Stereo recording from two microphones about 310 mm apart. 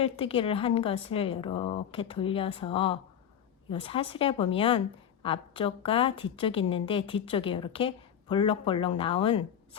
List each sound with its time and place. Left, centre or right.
0.0 s a woman's voice: centre